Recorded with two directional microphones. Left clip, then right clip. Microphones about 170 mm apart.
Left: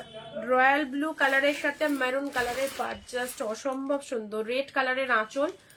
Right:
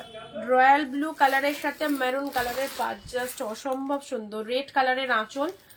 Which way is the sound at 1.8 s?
30° left (ahead or behind).